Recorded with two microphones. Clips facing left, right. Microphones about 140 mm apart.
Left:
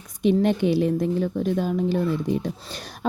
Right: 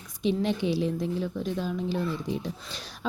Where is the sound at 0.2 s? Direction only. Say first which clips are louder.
Left 7 dB; 55° left (ahead or behind).